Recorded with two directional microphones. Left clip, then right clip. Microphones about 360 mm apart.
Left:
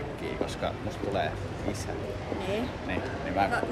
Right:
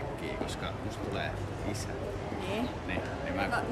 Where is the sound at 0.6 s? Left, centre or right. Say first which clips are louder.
Left 5 dB; centre.